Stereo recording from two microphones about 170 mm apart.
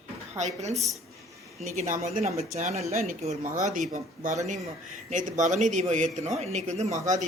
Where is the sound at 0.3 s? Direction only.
45° right (ahead or behind).